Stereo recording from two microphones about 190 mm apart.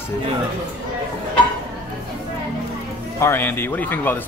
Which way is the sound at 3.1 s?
10° left (ahead or behind).